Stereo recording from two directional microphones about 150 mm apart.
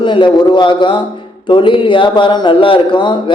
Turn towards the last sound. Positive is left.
turn(degrees=30)  # may be behind; listen again after turning